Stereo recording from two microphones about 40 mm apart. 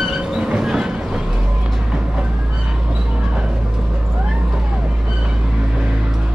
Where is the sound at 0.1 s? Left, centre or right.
Right.